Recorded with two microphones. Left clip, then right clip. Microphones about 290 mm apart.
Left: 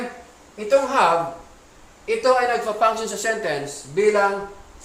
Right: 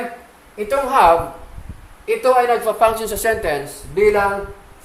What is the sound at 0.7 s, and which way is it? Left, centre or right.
Speech, centre.